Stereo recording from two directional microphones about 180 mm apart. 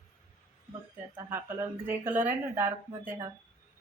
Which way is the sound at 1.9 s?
10° right (ahead or behind).